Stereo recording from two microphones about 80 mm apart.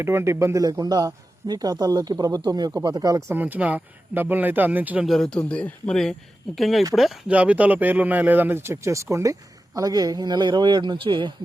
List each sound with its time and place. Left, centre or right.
0.0 s speech: right
0.6 s a man's voice: right
3.2 s speech: right
5.0 s speech: centre
6.6 s speech: centre
7.3 s speech: centre; by 11.3 s right